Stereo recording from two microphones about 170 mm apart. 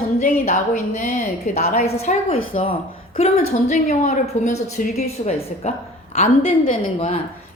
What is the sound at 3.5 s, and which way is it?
A woman's voice, 40° left (ahead or behind).